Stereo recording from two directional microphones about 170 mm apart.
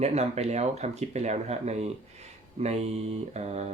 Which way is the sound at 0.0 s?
40° right (ahead or behind).